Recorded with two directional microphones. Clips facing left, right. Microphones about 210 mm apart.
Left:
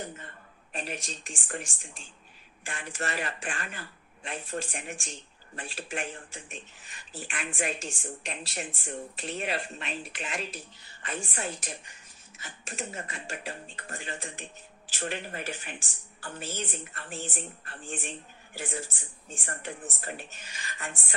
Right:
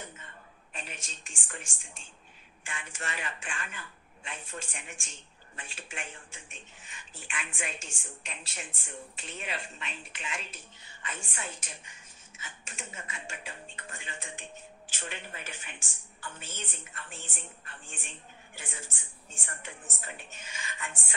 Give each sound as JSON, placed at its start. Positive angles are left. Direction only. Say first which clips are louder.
{"t": 0.7, "sound": "a woman's voice", "louder": "left 8 dB", "side_deg": 35}